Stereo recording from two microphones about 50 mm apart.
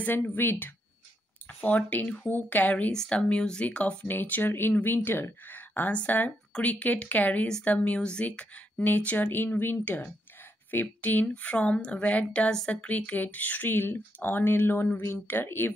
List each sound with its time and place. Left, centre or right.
0.0 s speech: left
1.6 s speech: left
3.1 s speech: centre
4.1 s speech: left
11.2 s speech: left
15.4 s speech: left